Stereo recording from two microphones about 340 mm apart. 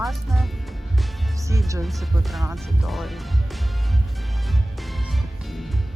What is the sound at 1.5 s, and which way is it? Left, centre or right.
Speech, centre.